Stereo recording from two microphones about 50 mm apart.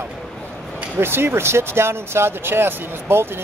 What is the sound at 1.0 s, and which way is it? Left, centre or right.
Speech, right.